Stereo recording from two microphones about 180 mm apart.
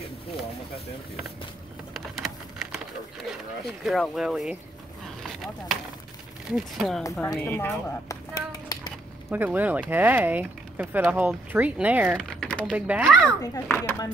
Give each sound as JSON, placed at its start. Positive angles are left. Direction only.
{"t": 2.0, "sound": "a sound", "side_deg": 0}
{"t": 3.3, "sound": "speech", "side_deg": 0}
{"t": 5.2, "sound": "a sound", "side_deg": 0}
{"t": 6.5, "sound": "speech", "side_deg": 0}
{"t": 7.0, "sound": "speech", "side_deg": 20}
{"t": 8.5, "sound": "a sound", "side_deg": 25}
{"t": 9.3, "sound": "speech", "side_deg": -10}
{"t": 12.2, "sound": "typing", "side_deg": 5}
{"t": 12.7, "sound": "speech", "side_deg": -10}
{"t": 13.4, "sound": "speech", "side_deg": 10}